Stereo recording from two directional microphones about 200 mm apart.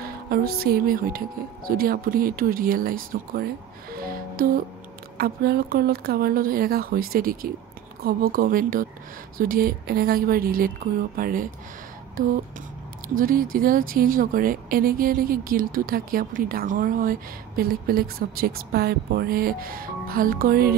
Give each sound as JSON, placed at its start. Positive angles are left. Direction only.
{"t": 0.0, "sound": "speech", "side_deg": -50}
{"t": 3.9, "sound": "music", "side_deg": -45}
{"t": 5.1, "sound": "speech", "side_deg": -50}
{"t": 13.1, "sound": "speech", "side_deg": -45}